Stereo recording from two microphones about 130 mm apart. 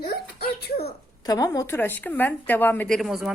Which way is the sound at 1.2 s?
25° left (ahead or behind).